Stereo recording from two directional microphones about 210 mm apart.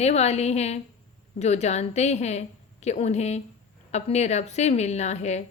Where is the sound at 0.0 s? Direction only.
30° left (ahead or behind).